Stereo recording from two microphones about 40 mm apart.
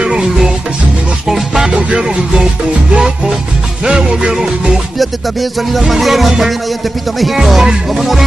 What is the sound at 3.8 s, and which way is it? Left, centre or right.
Music, right.